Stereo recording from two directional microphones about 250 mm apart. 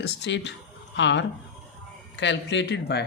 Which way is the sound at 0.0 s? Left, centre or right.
Left.